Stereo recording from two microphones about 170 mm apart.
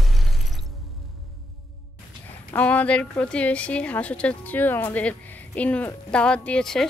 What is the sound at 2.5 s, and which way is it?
Speech, 10° left (ahead or behind).